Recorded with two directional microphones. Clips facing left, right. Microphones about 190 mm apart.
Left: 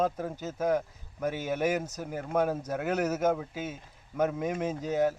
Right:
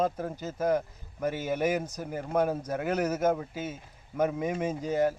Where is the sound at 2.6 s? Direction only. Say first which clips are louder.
Even; 10° right (ahead or behind).